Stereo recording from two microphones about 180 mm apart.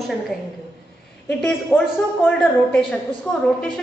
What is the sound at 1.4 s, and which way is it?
A woman's voice, 5° left (ahead or behind).